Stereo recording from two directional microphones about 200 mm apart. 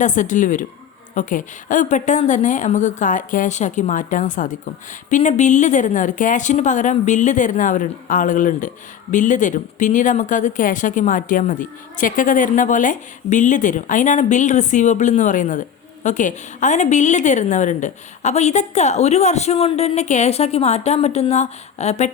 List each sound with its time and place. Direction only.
0.0 s a woman's voice: 40° left (ahead or behind)